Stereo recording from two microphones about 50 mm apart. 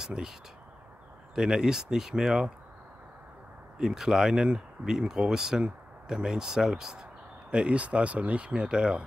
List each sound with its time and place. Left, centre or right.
0.0 s speech: centre
1.3 s speech: centre
3.7 s speech: centre